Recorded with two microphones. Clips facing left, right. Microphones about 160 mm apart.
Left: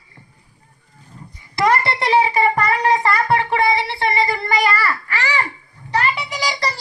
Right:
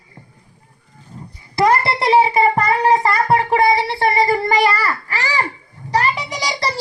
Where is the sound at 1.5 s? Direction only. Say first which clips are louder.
Right 2 dB; 30° right (ahead or behind).